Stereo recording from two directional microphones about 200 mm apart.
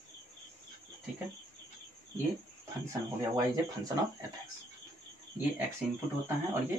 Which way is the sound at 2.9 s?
15° right (ahead or behind).